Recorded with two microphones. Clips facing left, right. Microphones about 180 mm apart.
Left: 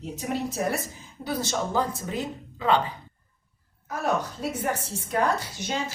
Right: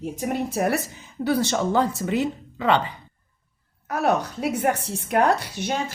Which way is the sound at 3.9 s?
70° right (ahead or behind).